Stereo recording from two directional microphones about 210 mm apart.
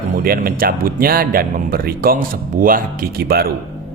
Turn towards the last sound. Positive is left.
turn(degrees=-45)  # may be behind; listen again after turning